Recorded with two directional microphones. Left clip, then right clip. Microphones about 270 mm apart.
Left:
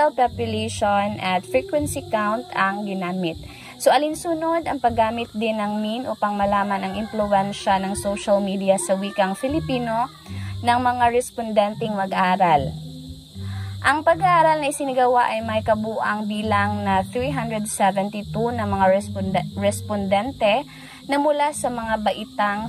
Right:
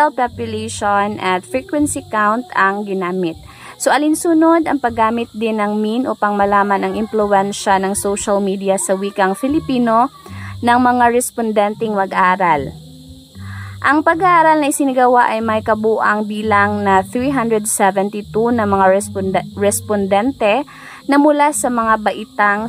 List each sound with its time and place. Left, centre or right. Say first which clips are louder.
0.0 s a woman's voice: right 4 dB; centre
13.9 s a woman's voice: right 6 dB; centre